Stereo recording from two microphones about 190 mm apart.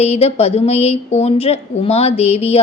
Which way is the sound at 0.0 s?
35° left (ahead or behind).